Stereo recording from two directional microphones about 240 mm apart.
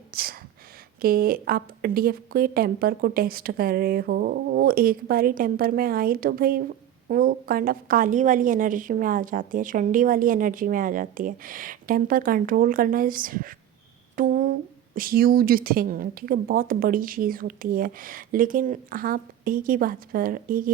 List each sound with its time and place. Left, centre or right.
0.1 s a woman's voice: right
14.2 s a sound: right
14.9 s a woman's voice: right